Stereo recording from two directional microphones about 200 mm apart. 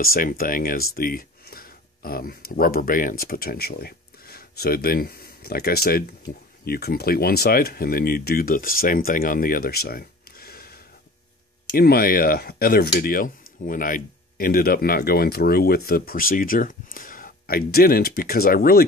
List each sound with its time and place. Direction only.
0.0 s speech: 45° left (ahead or behind)